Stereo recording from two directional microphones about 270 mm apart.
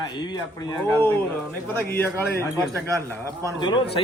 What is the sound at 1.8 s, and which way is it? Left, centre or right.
Speech, centre.